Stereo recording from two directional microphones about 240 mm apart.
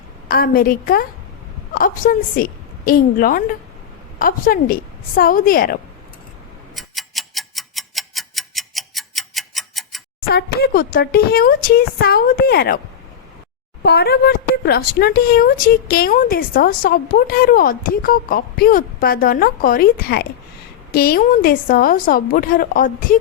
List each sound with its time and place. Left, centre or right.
0.3 s a woman's voice: left
6.7 s tick-tock: centre
10.2 s a woman's voice: left
13.8 s a woman's voice: left